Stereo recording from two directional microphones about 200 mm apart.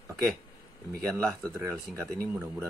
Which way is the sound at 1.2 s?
5° left (ahead or behind).